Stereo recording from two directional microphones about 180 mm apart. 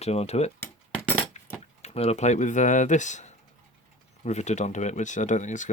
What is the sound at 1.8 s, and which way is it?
Speech, 35° left (ahead or behind).